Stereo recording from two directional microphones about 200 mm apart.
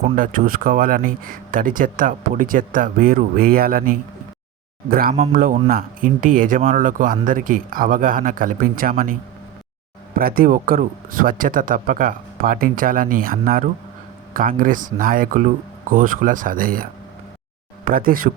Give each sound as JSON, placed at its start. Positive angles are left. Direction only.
{"t": 0.0, "sound": "speech", "side_deg": -45}
{"t": 10.2, "sound": "speech", "side_deg": -45}